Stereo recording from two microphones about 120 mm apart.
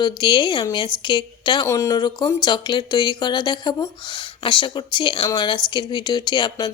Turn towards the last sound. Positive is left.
turn(degrees=40)  # may be behind; listen again after turning